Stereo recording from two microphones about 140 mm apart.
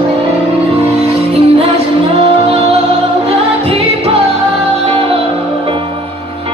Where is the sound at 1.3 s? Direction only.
45° right (ahead or behind).